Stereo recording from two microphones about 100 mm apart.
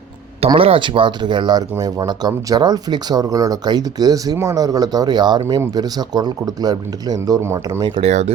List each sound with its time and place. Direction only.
0.4 s speech: 70° right (ahead or behind); by 7.4 s 40° right (ahead or behind)
7.4 s speech: 30° right (ahead or behind)
7.8 s speech: 55° right (ahead or behind)